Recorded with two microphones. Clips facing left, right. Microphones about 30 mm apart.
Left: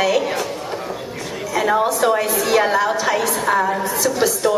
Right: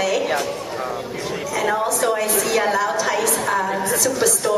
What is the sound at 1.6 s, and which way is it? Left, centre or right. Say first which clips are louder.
A woman's voice: left 4 dB; centre.